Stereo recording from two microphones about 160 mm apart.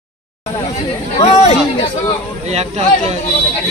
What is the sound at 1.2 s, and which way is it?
Speech, 40° left (ahead or behind).